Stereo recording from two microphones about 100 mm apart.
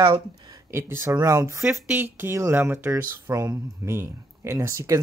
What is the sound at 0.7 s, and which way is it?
Speech, 25° right (ahead or behind).